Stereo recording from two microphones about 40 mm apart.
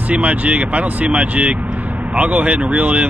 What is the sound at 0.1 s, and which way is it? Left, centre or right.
Speech, right.